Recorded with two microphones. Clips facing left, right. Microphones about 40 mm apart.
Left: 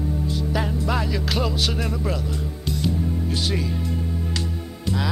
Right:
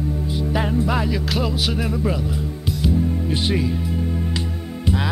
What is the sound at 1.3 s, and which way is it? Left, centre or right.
Speech, centre.